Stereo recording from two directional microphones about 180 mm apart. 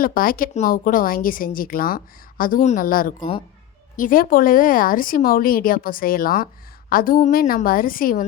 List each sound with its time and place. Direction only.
0.0 s speech: 50° left (ahead or behind)